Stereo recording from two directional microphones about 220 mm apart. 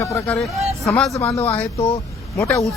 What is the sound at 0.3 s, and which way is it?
Speech, centre (ahead or behind).